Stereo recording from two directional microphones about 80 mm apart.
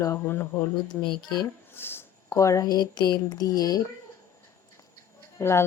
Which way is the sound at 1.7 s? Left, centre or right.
Left.